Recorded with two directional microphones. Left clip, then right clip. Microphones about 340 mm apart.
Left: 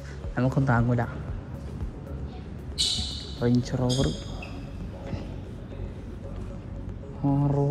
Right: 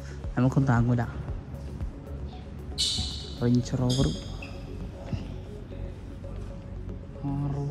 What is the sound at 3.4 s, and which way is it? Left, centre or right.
Speech, centre.